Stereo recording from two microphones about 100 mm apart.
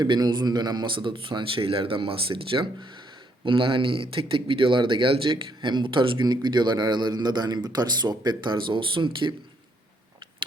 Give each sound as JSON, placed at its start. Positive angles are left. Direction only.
{"t": 0.0, "sound": "speech", "side_deg": -45}